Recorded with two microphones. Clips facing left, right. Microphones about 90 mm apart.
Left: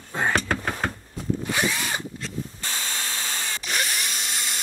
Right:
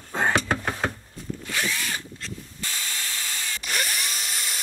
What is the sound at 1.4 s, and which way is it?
Drill, 20° left (ahead or behind).